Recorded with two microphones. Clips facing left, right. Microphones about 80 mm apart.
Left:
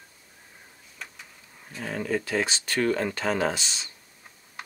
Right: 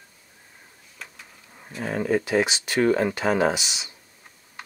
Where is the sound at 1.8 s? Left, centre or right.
Right.